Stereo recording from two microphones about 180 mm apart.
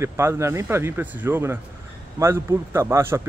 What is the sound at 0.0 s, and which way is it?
Speech, 15° right (ahead or behind).